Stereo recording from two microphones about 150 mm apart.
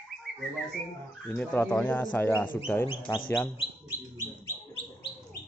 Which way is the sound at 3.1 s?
Centre (ahead or behind).